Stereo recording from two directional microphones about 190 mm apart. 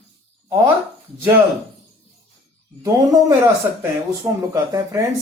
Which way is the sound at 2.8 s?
15° right (ahead or behind).